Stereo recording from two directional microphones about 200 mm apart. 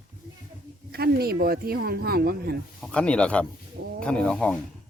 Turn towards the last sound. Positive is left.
turn(degrees=5)  # may be behind; listen again after turning